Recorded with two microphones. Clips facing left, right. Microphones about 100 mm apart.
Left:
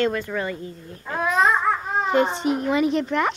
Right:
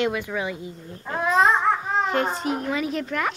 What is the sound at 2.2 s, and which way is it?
Speech, centre (ahead or behind).